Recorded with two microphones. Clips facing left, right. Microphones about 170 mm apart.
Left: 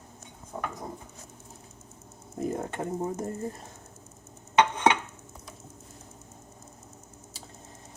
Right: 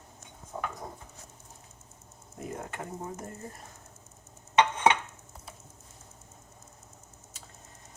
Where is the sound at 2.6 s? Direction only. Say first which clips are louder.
Left 7 dB; 30° left (ahead or behind).